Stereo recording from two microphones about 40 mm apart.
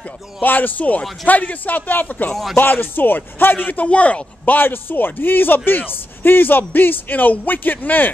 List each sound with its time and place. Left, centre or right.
0.4 s speech: left
2.5 s speech: left
4.6 s speech: left